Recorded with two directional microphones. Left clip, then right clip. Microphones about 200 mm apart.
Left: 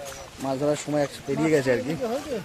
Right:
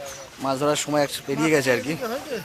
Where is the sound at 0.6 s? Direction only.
10° right (ahead or behind).